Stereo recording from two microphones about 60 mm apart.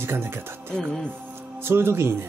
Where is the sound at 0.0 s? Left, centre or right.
Right.